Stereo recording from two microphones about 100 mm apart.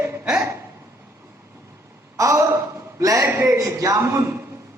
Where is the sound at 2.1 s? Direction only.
30° right (ahead or behind).